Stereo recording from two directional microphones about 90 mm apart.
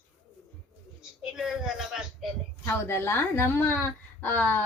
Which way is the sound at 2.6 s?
30° left (ahead or behind).